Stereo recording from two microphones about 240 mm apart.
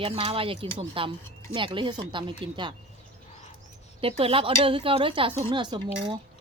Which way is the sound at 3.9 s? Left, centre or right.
Right.